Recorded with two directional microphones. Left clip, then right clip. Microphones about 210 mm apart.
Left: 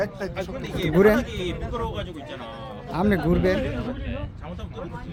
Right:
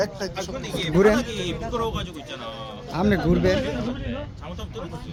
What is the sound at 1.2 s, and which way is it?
Speech, 60° right (ahead or behind).